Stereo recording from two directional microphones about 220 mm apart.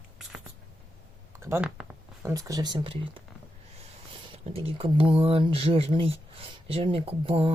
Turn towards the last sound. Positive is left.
turn(degrees=-25)  # may be behind; listen again after turning